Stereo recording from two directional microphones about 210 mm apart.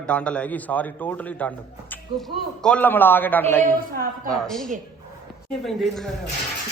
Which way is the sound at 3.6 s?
45° right (ahead or behind).